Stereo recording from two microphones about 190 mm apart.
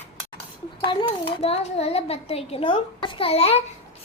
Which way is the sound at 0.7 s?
30° left (ahead or behind).